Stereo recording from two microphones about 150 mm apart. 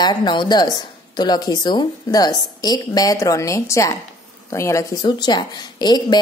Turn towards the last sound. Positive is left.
turn(degrees=30)  # may be behind; listen again after turning